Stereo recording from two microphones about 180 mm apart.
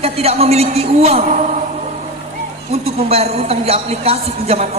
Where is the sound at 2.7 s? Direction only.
35° right (ahead or behind).